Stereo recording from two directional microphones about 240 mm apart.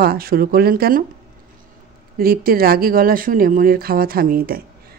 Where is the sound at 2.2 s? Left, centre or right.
Right.